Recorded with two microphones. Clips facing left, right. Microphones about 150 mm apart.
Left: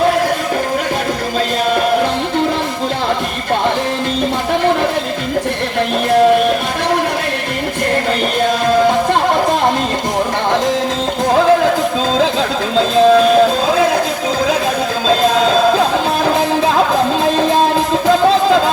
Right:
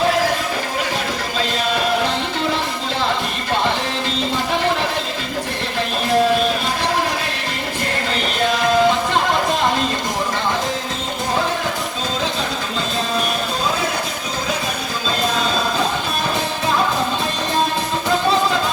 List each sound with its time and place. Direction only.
12.7 s music: 90° left
15.0 s music: 90° left